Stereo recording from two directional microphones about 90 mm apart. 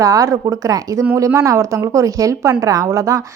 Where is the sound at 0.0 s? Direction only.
35° right (ahead or behind).